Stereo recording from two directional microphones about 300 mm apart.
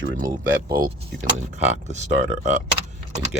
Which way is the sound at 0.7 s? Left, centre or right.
Right.